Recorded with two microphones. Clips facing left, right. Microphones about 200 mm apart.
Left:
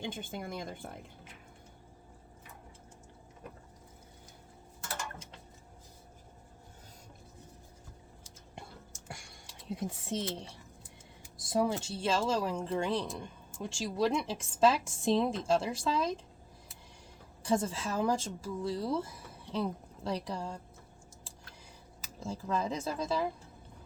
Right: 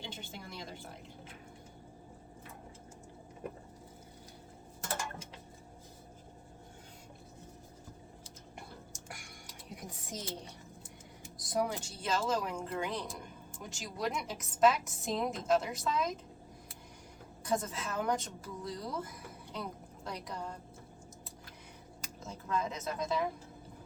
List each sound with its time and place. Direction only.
0.0 s speech: 50° left (ahead or behind)
9.0 s a sound: 25° left (ahead or behind)
11.3 s speech: 25° left (ahead or behind)
17.4 s speech: 30° left (ahead or behind)
22.2 s speech: 30° left (ahead or behind)